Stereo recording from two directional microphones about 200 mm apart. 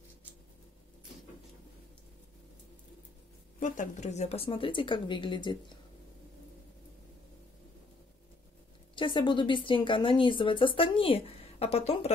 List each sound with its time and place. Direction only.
3.5 s speech: 40° left (ahead or behind); by 5.6 s 25° left (ahead or behind)
8.9 s speech: 25° left (ahead or behind)